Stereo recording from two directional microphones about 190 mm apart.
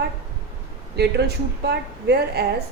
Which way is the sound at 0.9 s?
60° right (ahead or behind).